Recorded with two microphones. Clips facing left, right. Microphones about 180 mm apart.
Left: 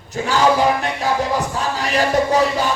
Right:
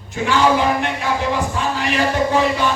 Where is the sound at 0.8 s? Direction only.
40° left (ahead or behind).